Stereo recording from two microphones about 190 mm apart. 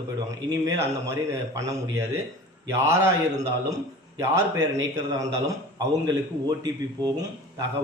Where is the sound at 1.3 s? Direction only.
15° right (ahead or behind).